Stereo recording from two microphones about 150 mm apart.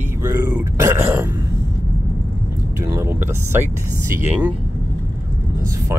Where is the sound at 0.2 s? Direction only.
15° right (ahead or behind).